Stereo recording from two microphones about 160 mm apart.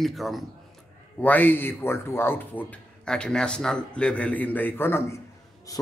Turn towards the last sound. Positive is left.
turn(degrees=20)  # may be behind; listen again after turning